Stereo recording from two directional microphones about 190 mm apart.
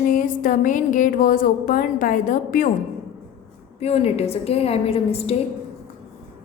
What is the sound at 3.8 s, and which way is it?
A woman's voice, 35° left (ahead or behind).